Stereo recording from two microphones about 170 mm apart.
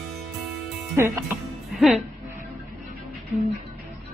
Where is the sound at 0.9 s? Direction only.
15° right (ahead or behind).